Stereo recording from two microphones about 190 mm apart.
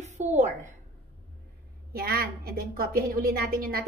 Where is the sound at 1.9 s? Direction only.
55° right (ahead or behind).